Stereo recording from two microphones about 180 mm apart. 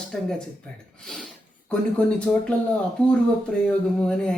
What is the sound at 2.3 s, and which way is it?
Speech, 10° left (ahead or behind).